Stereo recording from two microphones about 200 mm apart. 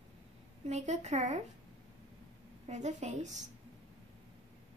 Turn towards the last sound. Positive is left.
turn(degrees=-35)  # may be behind; listen again after turning